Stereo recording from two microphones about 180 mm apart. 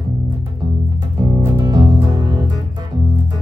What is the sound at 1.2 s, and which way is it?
Music, 20° right (ahead or behind).